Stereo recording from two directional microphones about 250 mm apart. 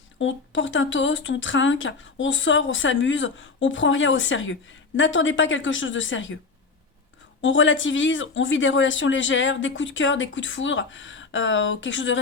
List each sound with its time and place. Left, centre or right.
0.2 s speech: left
7.4 s speech: left